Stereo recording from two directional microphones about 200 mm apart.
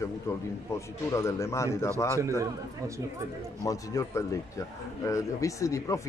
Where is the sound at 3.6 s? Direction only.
15° left (ahead or behind).